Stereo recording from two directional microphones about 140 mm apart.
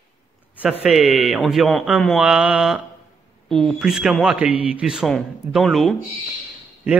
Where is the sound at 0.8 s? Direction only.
Centre (ahead or behind).